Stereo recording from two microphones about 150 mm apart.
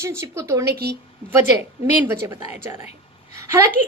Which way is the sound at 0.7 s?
90° right.